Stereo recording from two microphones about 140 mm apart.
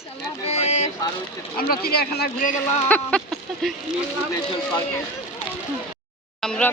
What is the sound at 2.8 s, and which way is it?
Speech, 10° left (ahead or behind).